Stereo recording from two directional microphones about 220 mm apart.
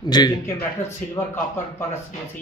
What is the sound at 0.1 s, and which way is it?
Speech, 15° left (ahead or behind).